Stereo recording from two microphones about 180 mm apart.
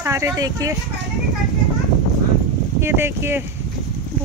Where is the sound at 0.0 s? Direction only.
15° right (ahead or behind).